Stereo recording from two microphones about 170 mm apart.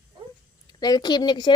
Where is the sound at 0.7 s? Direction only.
25° left (ahead or behind).